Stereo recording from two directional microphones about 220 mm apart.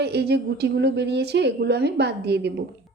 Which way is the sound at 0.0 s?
50° right (ahead or behind).